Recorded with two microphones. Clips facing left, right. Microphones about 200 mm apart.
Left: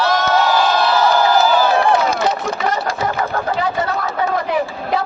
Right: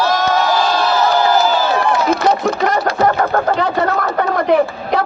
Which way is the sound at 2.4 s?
60° right (ahead or behind).